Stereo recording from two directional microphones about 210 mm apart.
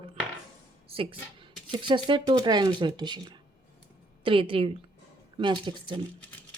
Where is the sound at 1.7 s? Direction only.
20° right (ahead or behind).